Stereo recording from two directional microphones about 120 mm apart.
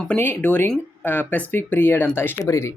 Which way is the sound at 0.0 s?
10° left (ahead or behind).